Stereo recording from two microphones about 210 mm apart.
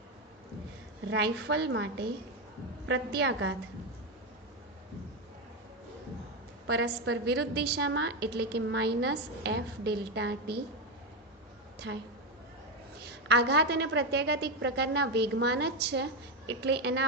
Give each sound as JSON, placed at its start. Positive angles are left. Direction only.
{"t": 1.1, "sound": "a woman's voice", "side_deg": -55}
{"t": 6.7, "sound": "a woman's voice", "side_deg": -55}
{"t": 11.9, "sound": "a woman's voice", "side_deg": -60}
{"t": 13.2, "sound": "a woman's voice", "side_deg": -55}